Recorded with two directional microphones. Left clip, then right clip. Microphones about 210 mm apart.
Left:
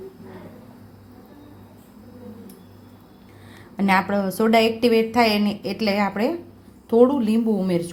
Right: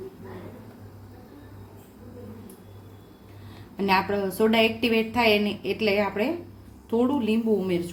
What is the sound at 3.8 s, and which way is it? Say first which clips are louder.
A woman's voice: left 3 dB; 25° left (ahead or behind).